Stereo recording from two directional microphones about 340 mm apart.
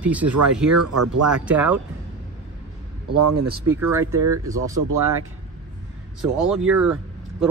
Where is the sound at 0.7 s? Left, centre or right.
Right.